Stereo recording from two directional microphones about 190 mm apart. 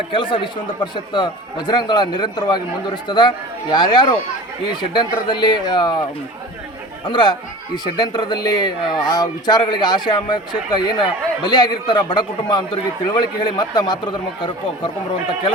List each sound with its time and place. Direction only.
0.1 s a man's voice: 25° left (ahead or behind)
7.0 s a man's voice: 25° left (ahead or behind)